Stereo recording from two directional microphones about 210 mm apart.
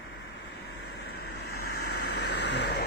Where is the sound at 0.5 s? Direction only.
50° left (ahead or behind).